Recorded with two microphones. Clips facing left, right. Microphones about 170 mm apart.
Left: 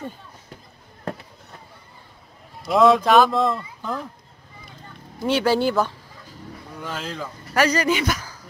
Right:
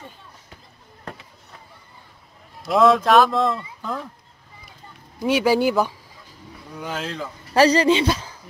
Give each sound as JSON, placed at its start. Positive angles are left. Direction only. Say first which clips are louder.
{"t": 2.6, "sound": "speech", "louder": "even", "side_deg": 0}
{"t": 5.2, "sound": "speech", "louder": "right 1 dB", "side_deg": -10}
{"t": 7.5, "sound": "speech", "louder": "right 4 dB", "side_deg": -30}